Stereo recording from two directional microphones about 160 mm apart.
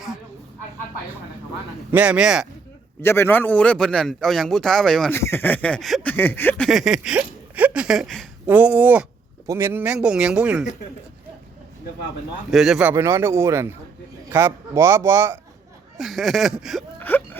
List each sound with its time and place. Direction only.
1.9 s speech: 10° right (ahead or behind)
3.0 s speech: 15° left (ahead or behind)
5.1 s speech: 15° left (ahead or behind)
6.7 s speech: centre (ahead or behind)
8.4 s a man's voice: 10° right (ahead or behind)
12.5 s speech: 5° right (ahead or behind)
12.9 s a man's voice: 15° right (ahead or behind)
16.0 s speech: centre (ahead or behind)
17.0 s whimper: 10° left (ahead or behind)